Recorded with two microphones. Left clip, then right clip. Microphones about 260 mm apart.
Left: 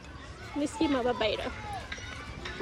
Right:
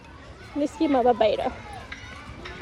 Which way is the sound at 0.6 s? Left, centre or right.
Centre.